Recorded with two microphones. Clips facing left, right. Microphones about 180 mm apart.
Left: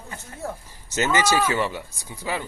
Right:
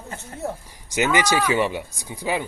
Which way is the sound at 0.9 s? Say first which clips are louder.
Right 1 dB; 15° right (ahead or behind).